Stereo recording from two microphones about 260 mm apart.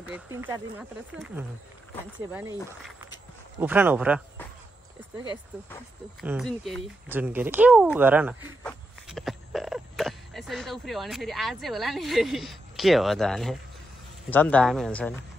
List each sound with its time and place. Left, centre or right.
0.1 s speech: centre
5.2 s speech: centre
6.2 s speech: centre
8.6 s a sound: centre
14.3 s speech: centre